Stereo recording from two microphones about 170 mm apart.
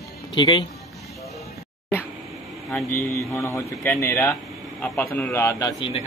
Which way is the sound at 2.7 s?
15° left (ahead or behind).